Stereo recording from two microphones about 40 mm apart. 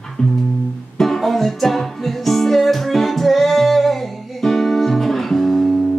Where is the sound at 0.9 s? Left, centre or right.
Centre.